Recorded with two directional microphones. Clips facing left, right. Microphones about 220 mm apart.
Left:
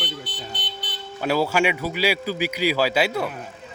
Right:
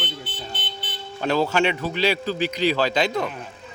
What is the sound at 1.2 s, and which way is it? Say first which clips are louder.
A man's voice: even; 10° left (ahead or behind).